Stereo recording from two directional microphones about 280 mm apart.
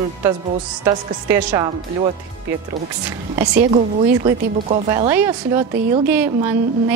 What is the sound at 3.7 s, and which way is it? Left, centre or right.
A woman's voice, right.